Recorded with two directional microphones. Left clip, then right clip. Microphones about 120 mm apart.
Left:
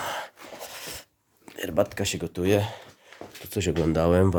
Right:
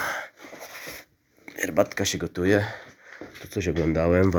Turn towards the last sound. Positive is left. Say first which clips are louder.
# even
turn(degrees=45)  # may be behind; listen again after turning